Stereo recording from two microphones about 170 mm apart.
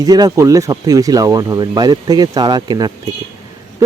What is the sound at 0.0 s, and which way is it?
Speech, 20° right (ahead or behind).